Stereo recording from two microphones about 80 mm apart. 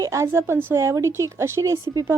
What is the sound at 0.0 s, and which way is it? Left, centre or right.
A woman's voice, right.